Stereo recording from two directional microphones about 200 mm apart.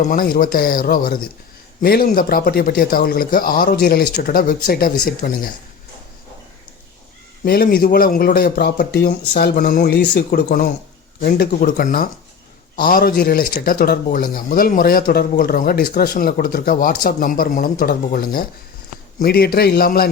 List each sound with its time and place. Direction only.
0.1 s speech: 45° left (ahead or behind)
7.4 s speech: 50° left (ahead or behind)